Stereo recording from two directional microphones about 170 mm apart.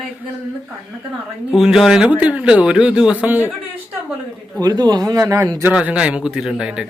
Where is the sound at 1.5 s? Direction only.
Centre (ahead or behind).